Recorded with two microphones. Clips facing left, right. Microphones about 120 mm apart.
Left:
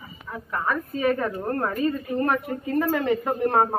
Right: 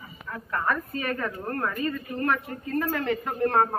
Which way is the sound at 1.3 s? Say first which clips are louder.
Left 4 dB; 25° left (ahead or behind).